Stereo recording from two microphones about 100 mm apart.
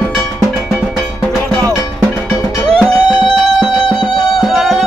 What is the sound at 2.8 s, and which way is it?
Music, 5° left (ahead or behind).